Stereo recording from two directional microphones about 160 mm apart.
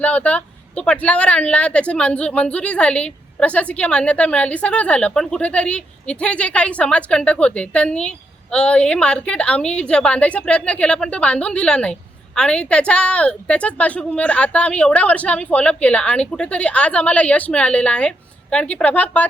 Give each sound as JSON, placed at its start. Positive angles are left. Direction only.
{"t": 0.0, "sound": "speech", "side_deg": 10}